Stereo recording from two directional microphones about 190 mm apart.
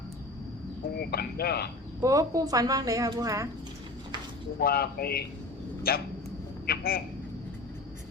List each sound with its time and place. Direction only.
0.9 s speech: 55° left (ahead or behind)
2.0 s a woman's voice: 15° right (ahead or behind)
4.6 s speech: 55° left (ahead or behind)